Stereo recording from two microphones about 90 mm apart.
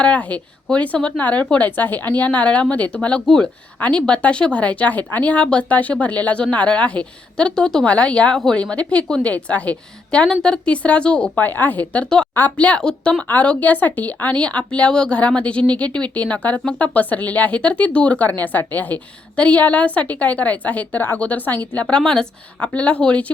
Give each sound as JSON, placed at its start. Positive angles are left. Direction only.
{"t": 0.0, "sound": "speech", "side_deg": 15}